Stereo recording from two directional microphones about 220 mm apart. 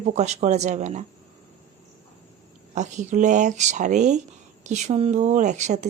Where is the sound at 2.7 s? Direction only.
35° right (ahead or behind).